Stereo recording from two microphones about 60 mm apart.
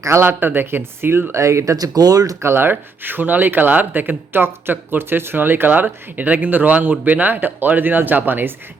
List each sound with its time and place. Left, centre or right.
0.2 s speech: right
2.0 s speech: right
2.4 s speech: right